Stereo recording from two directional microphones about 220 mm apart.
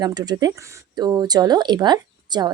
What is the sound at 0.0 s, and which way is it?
Speech, 20° right (ahead or behind).